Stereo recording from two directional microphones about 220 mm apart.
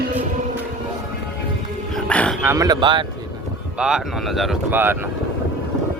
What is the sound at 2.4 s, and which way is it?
Speech, 10° right (ahead or behind).